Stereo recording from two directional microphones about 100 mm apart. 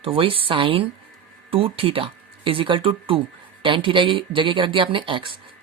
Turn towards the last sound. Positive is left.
turn(degrees=-55)  # may be behind; listen again after turning